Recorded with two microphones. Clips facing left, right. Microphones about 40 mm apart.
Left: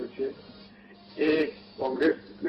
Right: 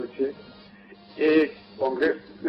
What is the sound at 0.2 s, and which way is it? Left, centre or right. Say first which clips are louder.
Speech: right 5 dB; centre.